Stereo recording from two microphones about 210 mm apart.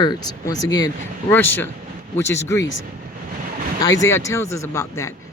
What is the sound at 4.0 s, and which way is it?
Speech, 15° left (ahead or behind).